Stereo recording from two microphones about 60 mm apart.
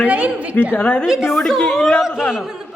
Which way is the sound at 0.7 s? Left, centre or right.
Left.